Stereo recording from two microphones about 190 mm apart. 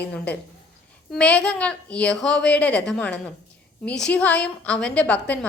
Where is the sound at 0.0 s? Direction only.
5° left (ahead or behind).